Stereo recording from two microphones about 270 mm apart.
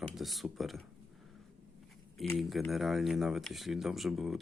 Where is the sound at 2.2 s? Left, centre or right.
Centre.